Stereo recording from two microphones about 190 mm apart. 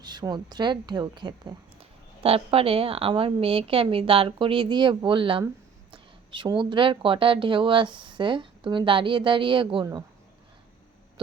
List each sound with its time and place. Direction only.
0.0 s a woman's voice: 20° right (ahead or behind)